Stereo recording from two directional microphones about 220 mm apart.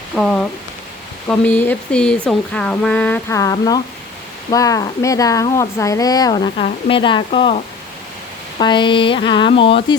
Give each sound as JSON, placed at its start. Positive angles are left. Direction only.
{"t": 0.2, "sound": "speech", "side_deg": 0}